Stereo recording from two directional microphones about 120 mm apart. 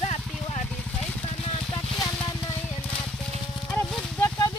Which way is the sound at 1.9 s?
35° left (ahead or behind).